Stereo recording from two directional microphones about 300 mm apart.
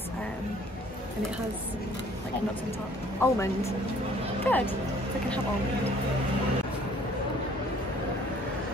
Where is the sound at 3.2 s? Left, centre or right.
Centre.